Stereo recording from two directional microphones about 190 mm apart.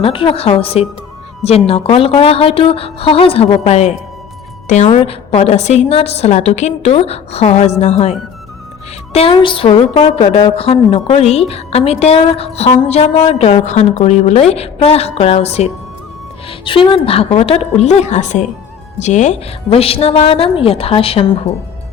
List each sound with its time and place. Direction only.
0.0 s a woman's voice: 30° left (ahead or behind)
9.1 s a woman's voice: 30° left (ahead or behind)